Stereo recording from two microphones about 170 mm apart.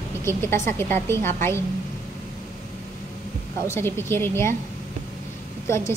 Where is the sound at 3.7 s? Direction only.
15° left (ahead or behind).